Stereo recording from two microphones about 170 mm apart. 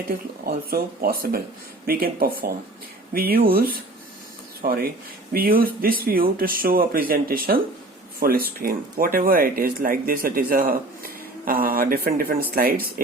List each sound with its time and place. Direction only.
0.4 s speech: 60° right (ahead or behind)